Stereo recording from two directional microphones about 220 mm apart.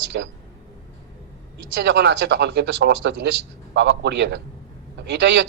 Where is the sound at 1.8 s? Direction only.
55° right (ahead or behind).